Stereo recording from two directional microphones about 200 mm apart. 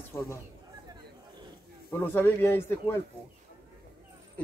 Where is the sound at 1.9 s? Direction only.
10° left (ahead or behind).